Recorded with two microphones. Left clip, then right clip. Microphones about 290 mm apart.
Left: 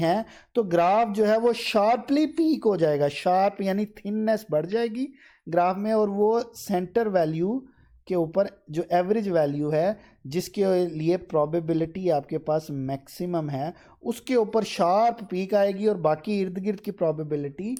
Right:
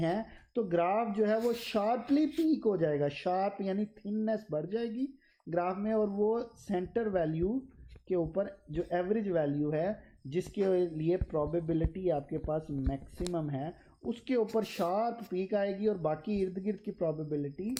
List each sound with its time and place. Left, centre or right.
0.0 s speech: left